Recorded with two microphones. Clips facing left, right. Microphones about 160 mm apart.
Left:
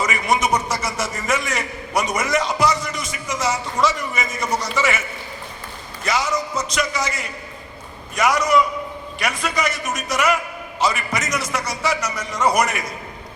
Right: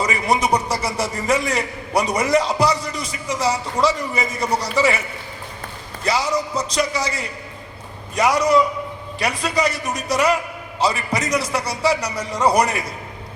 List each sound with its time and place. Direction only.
0.0 s a man's voice: 35° right (ahead or behind)
6.1 s a man's voice: 35° right (ahead or behind)